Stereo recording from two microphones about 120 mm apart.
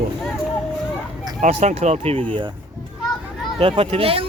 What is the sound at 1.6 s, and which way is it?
Speech, 65° right (ahead or behind).